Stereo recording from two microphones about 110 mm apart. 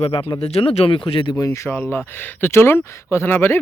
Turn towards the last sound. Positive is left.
turn(degrees=20)  # may be behind; listen again after turning